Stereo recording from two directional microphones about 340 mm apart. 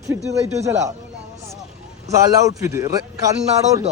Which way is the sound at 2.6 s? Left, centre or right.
Centre.